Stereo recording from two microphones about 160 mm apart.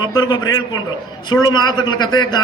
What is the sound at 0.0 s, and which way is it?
A man's voice, 25° left (ahead or behind).